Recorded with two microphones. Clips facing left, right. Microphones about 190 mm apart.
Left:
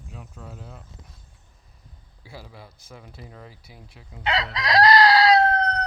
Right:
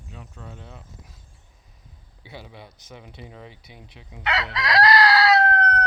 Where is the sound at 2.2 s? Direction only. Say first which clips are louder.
Right 1 dB; centre (ahead or behind).